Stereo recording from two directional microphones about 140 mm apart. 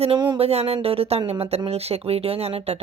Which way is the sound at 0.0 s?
35° right (ahead or behind).